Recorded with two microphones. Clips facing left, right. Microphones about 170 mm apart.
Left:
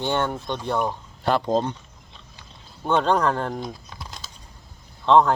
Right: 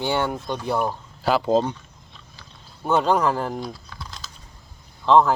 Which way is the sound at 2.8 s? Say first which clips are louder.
Right 1 dB; 5° right (ahead or behind).